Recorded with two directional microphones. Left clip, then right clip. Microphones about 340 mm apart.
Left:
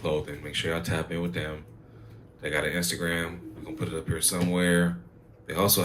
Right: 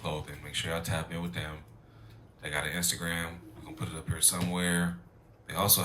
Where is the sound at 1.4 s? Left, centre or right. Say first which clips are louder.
Left 6 dB; right.